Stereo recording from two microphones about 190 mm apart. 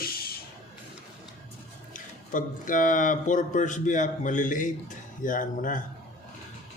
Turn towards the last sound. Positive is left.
turn(degrees=45)  # may be behind; listen again after turning